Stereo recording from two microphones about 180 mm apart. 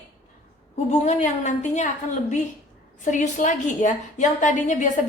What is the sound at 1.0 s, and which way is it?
Speech, 40° left (ahead or behind).